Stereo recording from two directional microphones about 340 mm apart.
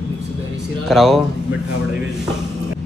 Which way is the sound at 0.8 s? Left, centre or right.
Centre.